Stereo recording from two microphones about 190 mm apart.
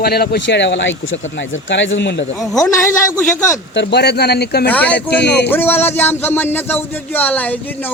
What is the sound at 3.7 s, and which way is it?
Speech, 60° left (ahead or behind).